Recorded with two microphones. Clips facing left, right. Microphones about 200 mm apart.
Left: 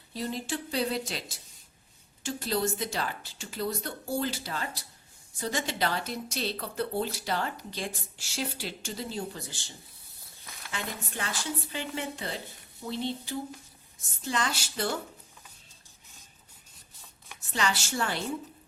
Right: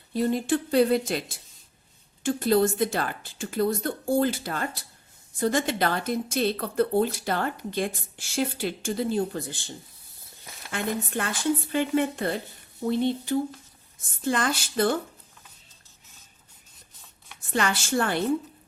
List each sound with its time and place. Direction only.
0.1 s speech: 55° right (ahead or behind)
2.2 s a woman's voice: 55° right (ahead or behind)
17.5 s speech: 55° right (ahead or behind)